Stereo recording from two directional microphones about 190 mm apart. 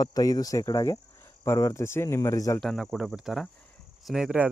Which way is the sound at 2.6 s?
Centre (ahead or behind).